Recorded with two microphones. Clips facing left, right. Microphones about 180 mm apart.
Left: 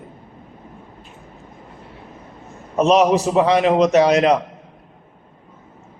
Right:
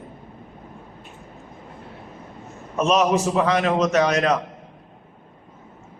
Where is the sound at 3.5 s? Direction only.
20° left (ahead or behind).